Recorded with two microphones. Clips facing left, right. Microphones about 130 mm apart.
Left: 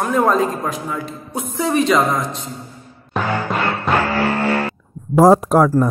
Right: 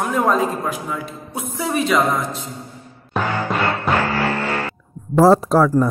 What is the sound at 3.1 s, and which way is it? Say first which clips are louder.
Music: even; centre (ahead or behind).